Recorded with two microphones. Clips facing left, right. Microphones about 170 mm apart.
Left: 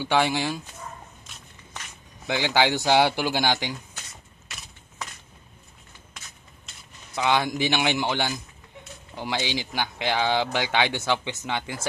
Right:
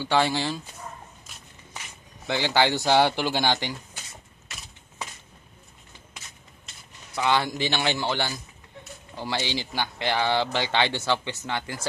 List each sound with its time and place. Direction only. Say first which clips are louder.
0.0 s speech: even; 15° left (ahead or behind)
1.2 s walk: even; 5° right (ahead or behind)
2.2 s speech: even; 15° left (ahead or behind)
7.2 s speech: left 1 dB; 15° left (ahead or behind)